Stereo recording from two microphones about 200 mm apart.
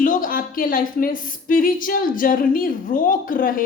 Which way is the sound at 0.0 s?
45° left (ahead or behind).